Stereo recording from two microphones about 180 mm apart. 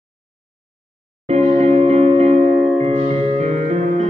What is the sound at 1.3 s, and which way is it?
Music, 35° right (ahead or behind).